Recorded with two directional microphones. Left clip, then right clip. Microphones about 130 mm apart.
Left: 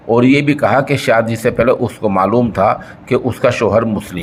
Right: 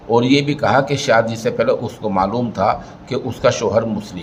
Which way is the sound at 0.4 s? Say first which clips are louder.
Left 3 dB; 50° left (ahead or behind).